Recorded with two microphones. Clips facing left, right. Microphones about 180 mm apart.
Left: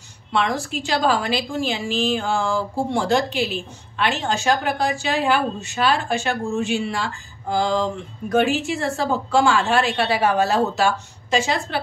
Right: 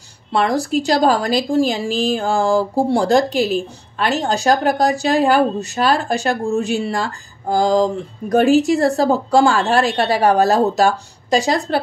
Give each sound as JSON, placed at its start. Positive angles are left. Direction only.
{"t": 0.3, "sound": "a woman's voice", "side_deg": -40}